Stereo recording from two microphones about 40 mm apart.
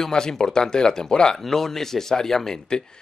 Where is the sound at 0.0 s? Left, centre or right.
Centre.